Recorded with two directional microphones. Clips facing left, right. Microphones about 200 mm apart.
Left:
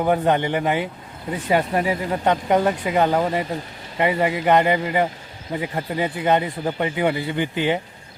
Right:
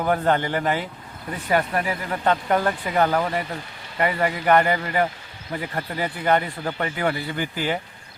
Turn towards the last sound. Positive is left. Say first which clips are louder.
# left 4 dB
turn(degrees=20)  # may be behind; listen again after turning